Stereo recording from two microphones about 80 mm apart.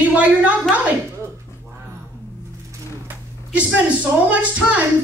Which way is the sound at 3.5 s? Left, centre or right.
Centre.